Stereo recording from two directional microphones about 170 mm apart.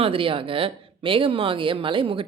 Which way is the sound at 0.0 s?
30° right (ahead or behind).